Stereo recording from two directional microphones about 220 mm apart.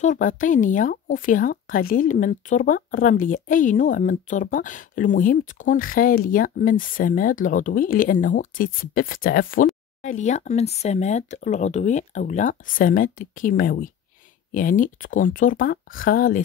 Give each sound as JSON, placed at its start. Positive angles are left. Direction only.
{"t": 0.0, "sound": "speech", "side_deg": 35}